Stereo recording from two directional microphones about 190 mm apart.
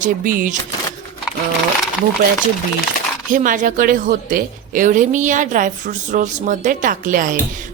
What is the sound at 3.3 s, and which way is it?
A woman's voice, 45° right (ahead or behind).